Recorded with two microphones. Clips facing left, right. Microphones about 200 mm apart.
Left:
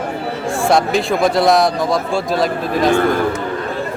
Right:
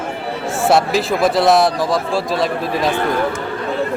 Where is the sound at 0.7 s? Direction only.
5° right (ahead or behind).